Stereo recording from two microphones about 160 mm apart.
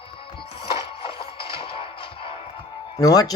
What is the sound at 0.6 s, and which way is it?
Music, 35° left (ahead or behind).